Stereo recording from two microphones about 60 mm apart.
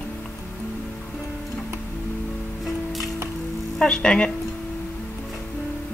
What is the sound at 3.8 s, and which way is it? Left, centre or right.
Speech, centre.